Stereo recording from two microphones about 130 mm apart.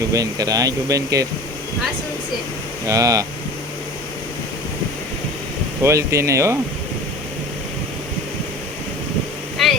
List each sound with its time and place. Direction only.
0.1 s speech: 25° right (ahead or behind)
2.8 s speech: 25° right (ahead or behind)
5.8 s speech: 20° right (ahead or behind)
9.6 s vehicle: centre (ahead or behind)